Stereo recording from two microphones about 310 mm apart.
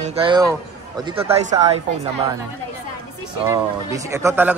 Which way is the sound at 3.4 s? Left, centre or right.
Centre.